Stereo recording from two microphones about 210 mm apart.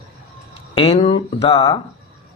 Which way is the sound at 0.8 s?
25° left (ahead or behind).